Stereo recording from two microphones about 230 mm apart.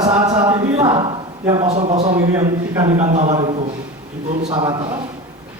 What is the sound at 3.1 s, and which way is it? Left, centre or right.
A man's voice, right.